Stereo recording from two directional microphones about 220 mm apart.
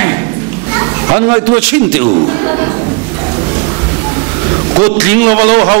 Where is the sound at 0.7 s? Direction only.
15° right (ahead or behind).